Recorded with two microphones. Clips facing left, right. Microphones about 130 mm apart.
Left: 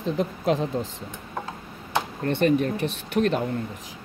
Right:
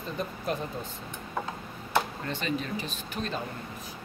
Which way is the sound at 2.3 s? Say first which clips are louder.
Left 11 dB; 60° left (ahead or behind).